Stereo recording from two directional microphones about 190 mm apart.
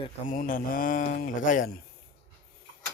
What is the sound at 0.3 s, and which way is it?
Speech, 45° left (ahead or behind).